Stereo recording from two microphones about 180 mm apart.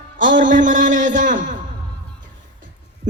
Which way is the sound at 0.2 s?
90° right.